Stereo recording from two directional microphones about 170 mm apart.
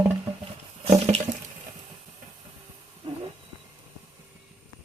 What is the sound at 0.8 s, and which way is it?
Water, 35° right (ahead or behind).